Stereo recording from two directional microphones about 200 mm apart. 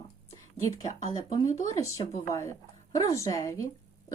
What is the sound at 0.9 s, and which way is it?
Speech, 35° left (ahead or behind).